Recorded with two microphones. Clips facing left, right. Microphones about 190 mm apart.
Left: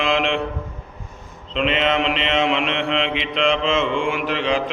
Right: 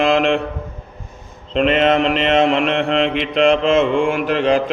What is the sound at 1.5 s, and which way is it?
Mantra, 45° right (ahead or behind).